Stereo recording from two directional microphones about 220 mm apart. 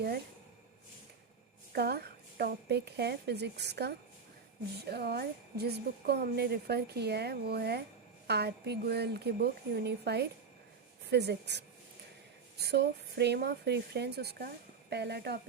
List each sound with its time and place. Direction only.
1.7 s a woman's voice: 45° right (ahead or behind)